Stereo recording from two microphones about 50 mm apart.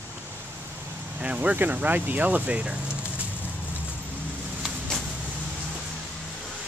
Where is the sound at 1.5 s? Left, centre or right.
Right.